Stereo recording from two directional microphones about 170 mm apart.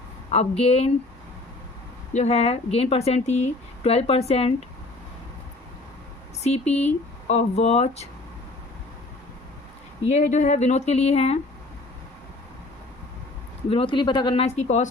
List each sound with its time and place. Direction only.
0.3 s speech: 35° left (ahead or behind)
2.1 s speech: 40° left (ahead or behind)
6.4 s speech: 40° left (ahead or behind)
10.1 s speech: 40° left (ahead or behind)
13.7 s speech: 30° left (ahead or behind)